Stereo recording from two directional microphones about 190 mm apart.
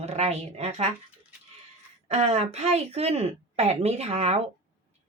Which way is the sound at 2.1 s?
35° right (ahead or behind).